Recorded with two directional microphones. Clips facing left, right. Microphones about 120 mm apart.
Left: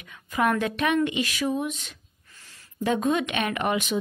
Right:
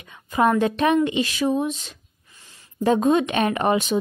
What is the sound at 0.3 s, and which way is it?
Speech, 30° right (ahead or behind).